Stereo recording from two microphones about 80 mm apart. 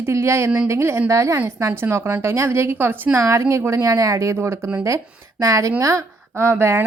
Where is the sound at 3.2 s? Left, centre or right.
Right.